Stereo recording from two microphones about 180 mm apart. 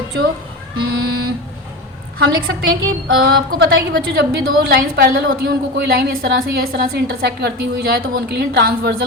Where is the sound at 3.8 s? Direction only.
65° right (ahead or behind).